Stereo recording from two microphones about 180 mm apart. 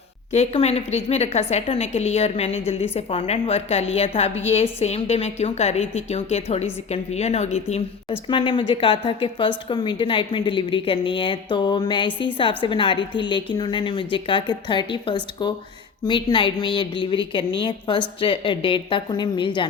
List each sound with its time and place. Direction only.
0.3 s a woman's voice: 35° left (ahead or behind)